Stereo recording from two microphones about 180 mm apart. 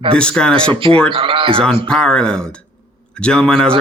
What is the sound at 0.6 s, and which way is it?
A woman's voice, 30° right (ahead or behind).